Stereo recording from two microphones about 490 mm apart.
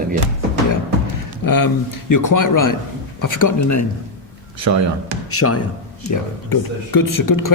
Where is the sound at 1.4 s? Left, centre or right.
Left.